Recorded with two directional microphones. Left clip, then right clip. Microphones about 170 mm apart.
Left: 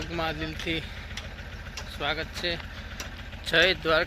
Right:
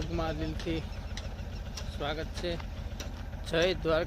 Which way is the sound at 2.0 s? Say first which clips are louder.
Left 6 dB; centre (ahead or behind).